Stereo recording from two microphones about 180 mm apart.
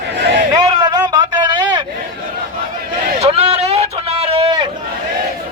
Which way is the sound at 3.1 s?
35° right (ahead or behind).